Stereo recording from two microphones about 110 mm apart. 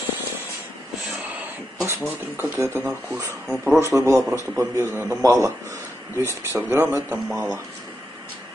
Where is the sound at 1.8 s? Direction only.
25° right (ahead or behind).